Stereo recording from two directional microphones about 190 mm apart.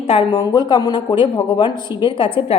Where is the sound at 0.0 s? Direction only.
30° left (ahead or behind).